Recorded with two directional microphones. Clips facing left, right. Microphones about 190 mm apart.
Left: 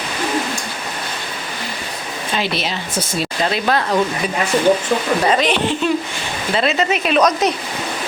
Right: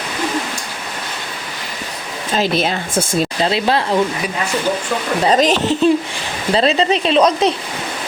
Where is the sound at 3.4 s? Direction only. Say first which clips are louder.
Even; 25° right (ahead or behind).